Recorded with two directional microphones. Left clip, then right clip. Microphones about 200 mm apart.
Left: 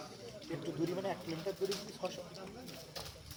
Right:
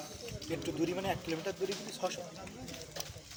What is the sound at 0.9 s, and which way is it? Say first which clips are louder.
Speech: right 4 dB; 50° right (ahead or behind).